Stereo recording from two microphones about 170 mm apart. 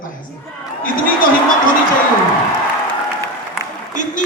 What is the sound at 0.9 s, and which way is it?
Speech, 55° left (ahead or behind).